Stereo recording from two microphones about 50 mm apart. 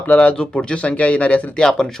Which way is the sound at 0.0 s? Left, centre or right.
Left.